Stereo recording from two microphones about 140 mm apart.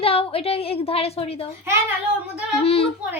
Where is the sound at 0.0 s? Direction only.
45° left (ahead or behind).